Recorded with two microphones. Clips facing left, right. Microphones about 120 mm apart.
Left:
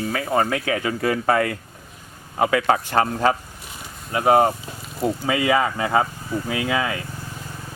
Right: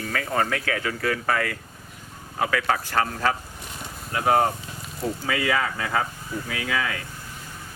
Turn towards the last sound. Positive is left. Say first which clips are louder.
# left 5 dB
turn(degrees=20)  # may be behind; listen again after turning